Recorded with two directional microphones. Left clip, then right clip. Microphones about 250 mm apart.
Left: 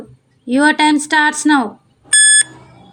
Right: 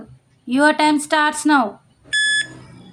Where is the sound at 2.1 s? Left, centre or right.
Left.